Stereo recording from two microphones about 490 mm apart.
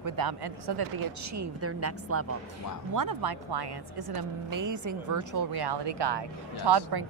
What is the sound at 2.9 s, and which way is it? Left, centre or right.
A woman's voice, right.